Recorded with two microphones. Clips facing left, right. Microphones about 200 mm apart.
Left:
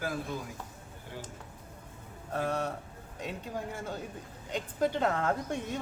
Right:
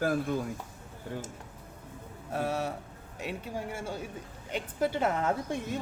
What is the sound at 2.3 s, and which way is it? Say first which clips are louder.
A woman's voice: right 1 dB; 10° right (ahead or behind).